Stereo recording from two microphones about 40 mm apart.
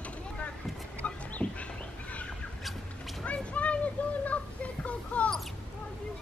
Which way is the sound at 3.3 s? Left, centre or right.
Left.